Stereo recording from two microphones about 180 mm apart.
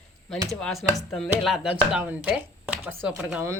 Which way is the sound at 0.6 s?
Centre (ahead or behind).